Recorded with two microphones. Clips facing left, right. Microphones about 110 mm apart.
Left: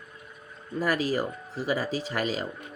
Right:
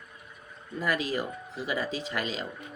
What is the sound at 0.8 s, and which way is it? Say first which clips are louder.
Speech: left 3 dB; 35° left (ahead or behind).